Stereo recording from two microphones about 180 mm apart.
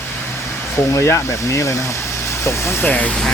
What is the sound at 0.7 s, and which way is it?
Speech, 15° left (ahead or behind).